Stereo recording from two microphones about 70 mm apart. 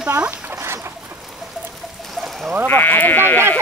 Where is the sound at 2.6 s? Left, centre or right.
Left.